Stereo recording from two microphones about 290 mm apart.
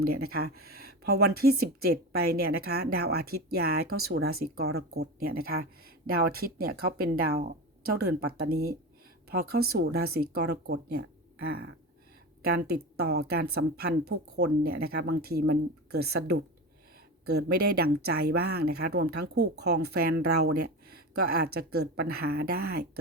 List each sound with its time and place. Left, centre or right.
0.0 s speech: right